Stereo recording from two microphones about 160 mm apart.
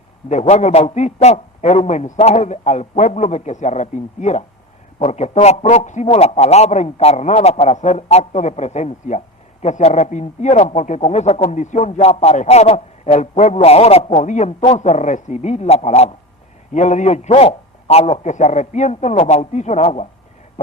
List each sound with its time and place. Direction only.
0.3 s a man's voice: 45° left (ahead or behind)